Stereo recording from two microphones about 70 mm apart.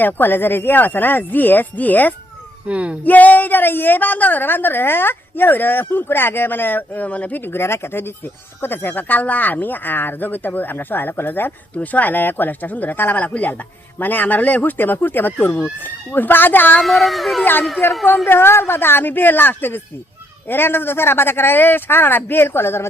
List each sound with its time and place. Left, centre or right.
0.0 s a woman's voice: left
2.6 s speech: centre
3.0 s a woman's voice: left
16.8 s speech: centre
17.4 s a woman's voice: left